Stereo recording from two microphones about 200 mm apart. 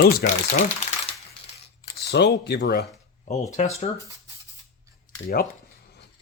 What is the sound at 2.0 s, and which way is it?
Speech, 55° left (ahead or behind).